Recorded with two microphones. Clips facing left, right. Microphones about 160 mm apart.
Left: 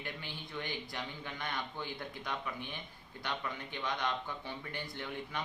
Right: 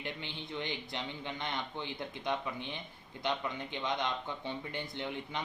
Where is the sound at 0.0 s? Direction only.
20° right (ahead or behind).